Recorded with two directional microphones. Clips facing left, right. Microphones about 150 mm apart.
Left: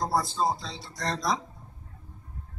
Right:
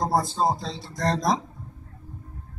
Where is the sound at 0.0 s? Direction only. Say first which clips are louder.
Right 3 dB; 40° right (ahead or behind).